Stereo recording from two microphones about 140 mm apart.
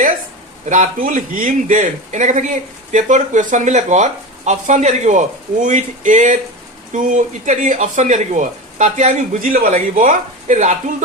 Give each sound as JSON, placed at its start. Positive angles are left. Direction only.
{"t": 0.7, "sound": "a man's voice", "side_deg": -70}